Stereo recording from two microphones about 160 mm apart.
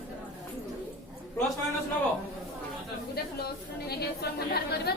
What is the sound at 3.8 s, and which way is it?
A woman's voice, 80° left.